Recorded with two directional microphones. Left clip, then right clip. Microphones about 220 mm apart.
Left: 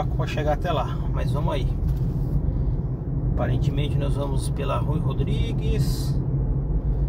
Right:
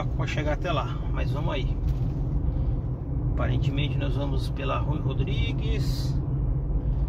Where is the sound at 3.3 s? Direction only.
15° left (ahead or behind).